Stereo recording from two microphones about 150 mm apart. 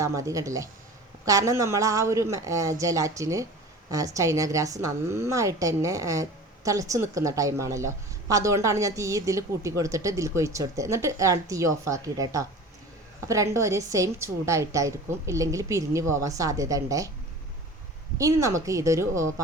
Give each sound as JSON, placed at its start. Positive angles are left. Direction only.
{"t": 0.0, "sound": "a woman's voice", "side_deg": -20}
{"t": 18.2, "sound": "a woman's voice", "side_deg": -20}